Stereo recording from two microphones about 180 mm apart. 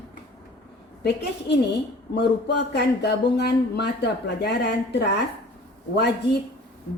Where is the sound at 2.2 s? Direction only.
70° left (ahead or behind).